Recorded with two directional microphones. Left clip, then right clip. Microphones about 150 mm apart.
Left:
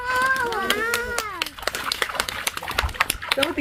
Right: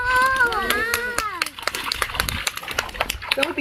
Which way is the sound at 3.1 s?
20° right (ahead or behind).